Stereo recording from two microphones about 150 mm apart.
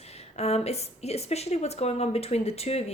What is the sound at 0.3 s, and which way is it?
A woman's voice, 45° left (ahead or behind).